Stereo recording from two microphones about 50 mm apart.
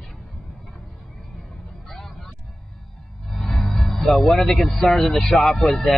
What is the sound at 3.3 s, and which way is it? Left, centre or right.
Music, centre.